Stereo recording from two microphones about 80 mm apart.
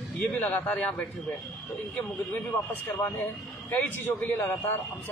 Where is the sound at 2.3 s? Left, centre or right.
Left.